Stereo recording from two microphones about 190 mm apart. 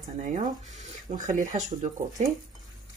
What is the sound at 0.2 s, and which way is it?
Speech, 40° right (ahead or behind).